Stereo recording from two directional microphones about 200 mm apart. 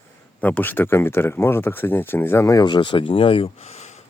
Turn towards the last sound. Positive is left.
turn(degrees=35)  # may be behind; listen again after turning